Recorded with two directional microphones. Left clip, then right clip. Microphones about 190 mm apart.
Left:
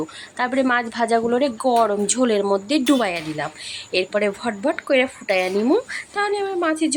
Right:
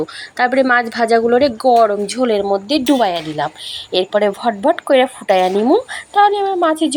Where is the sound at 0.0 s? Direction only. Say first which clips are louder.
Right 8 dB; 5° right (ahead or behind).